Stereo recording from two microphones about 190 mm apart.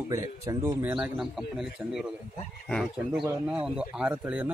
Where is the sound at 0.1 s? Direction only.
15° right (ahead or behind).